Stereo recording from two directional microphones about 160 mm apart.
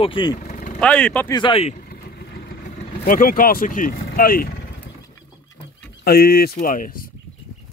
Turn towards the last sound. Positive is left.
turn(degrees=60)  # may be behind; listen again after turning